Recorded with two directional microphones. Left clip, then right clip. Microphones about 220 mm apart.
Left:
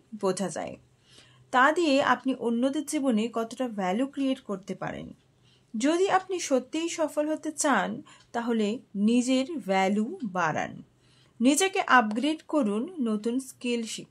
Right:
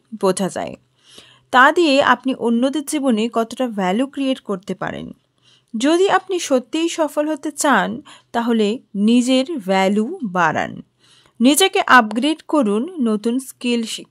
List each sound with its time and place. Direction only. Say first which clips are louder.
0.2 s speech: right 10 dB; 40° right (ahead or behind)